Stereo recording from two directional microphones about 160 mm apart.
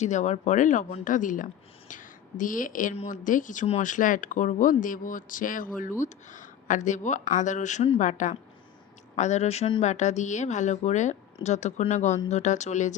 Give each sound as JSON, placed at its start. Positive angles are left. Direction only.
{"t": 0.0, "sound": "a woman's voice", "side_deg": 45}